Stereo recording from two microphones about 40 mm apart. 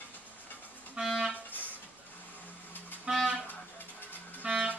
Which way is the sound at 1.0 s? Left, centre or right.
Centre.